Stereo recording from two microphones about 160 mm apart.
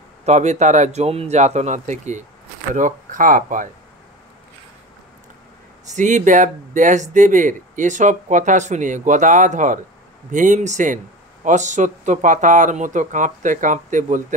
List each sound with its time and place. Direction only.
0.2 s speech: 45° right (ahead or behind)
5.9 s speech: 50° right (ahead or behind)